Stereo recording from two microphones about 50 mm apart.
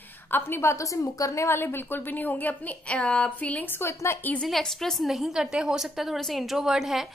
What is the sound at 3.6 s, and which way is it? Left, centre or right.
Speech, left.